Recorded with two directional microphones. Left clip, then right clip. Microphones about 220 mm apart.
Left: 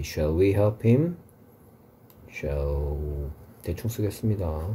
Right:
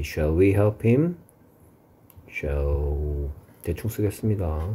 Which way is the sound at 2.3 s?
25° right (ahead or behind).